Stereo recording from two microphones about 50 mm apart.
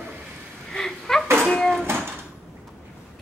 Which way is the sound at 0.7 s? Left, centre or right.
Centre.